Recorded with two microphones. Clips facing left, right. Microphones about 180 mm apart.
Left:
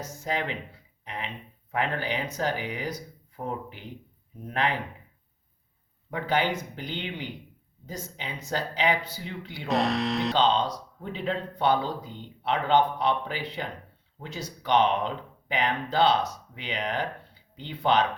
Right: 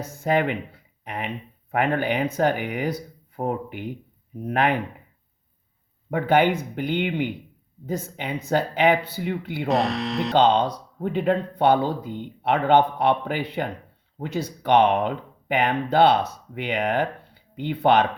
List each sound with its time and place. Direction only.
0.0 s speech: 55° right (ahead or behind)
1.0 s a sound: 55° right (ahead or behind)
1.7 s speech: 55° right (ahead or behind)
6.1 s speech: 55° right (ahead or behind)
9.6 s speech: centre (ahead or behind)
10.3 s speech: 55° right (ahead or behind)